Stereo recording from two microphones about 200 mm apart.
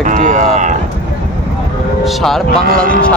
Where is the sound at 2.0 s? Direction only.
Centre (ahead or behind).